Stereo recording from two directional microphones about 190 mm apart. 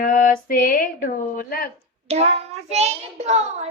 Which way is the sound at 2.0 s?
35° right (ahead or behind).